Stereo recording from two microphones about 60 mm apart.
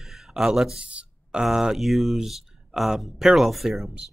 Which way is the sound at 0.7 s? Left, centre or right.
Centre.